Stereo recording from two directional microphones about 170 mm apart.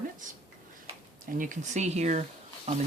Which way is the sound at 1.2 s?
50° right (ahead or behind).